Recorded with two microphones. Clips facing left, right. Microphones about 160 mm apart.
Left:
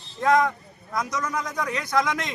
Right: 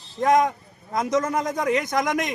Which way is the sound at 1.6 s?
20° right (ahead or behind).